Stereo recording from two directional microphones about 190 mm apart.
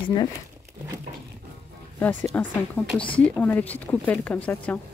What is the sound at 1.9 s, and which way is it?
Speech, 10° left (ahead or behind).